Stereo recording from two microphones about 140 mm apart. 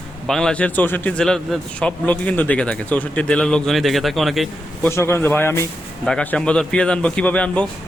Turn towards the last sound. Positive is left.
turn(degrees=10)  # may be behind; listen again after turning